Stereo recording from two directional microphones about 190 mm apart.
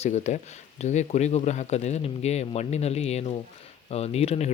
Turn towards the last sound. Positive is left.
turn(degrees=35)  # may be behind; listen again after turning